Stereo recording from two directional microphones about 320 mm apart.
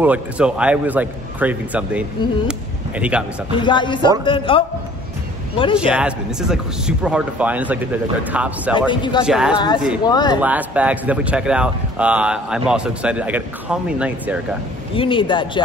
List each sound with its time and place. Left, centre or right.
0.0 s a man's voice: centre
3.5 s speech: centre
5.8 s a man's voice: centre
8.7 s speech: centre
9.2 s a man's voice: centre
10.0 s speech: centre
10.4 s a man's voice: centre
15.0 s speech: centre